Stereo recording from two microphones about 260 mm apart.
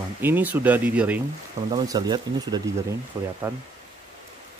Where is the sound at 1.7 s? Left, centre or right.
Centre.